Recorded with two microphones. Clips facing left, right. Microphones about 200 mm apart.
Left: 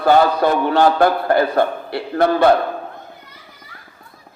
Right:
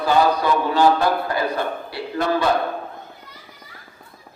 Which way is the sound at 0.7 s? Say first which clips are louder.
Left 2 dB; 60° left (ahead or behind).